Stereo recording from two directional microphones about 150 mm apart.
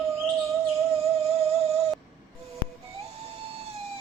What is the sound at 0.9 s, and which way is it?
Music, 40° right (ahead or behind).